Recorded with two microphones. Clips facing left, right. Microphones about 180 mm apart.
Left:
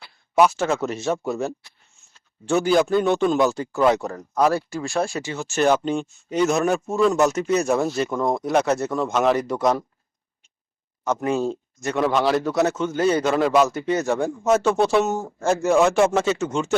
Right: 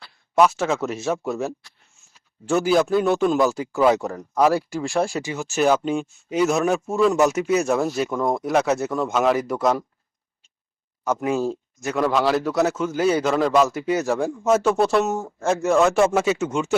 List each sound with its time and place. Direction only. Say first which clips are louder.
0.3 s speech: even; centre (ahead or behind)
11.0 s speech: even; 5° right (ahead or behind)